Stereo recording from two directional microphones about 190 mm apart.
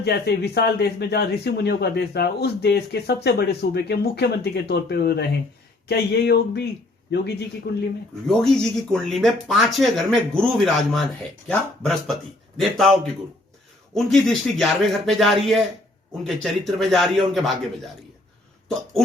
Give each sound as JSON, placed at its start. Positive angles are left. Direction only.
{"t": 0.0, "sound": "speech", "side_deg": 60}
{"t": 8.3, "sound": "speech", "side_deg": 5}